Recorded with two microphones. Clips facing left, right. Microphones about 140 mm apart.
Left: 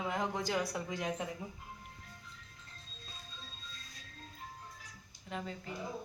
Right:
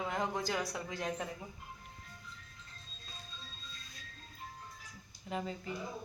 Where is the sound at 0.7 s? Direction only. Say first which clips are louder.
Left 1 dB; 15° left (ahead or behind).